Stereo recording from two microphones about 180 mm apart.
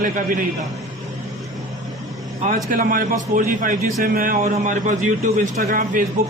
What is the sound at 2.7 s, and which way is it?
A man's voice, 50° right (ahead or behind).